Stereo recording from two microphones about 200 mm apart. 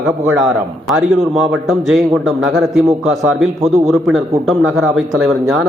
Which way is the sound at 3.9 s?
Centre (ahead or behind).